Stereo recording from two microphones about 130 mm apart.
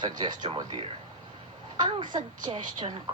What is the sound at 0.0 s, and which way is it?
Speech, 35° right (ahead or behind).